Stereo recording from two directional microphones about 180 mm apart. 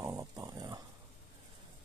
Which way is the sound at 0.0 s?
20° right (ahead or behind).